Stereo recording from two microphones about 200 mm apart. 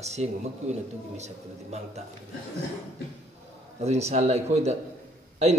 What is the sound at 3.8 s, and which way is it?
Speech, 30° right (ahead or behind).